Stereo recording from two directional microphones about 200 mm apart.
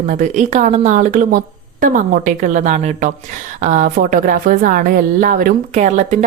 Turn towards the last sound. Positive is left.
turn(degrees=-35)  # may be behind; listen again after turning